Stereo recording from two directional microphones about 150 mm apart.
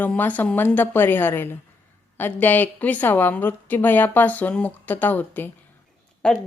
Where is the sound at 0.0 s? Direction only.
10° left (ahead or behind).